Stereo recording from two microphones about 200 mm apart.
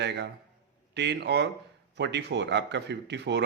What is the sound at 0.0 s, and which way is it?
A man's voice, 60° right (ahead or behind).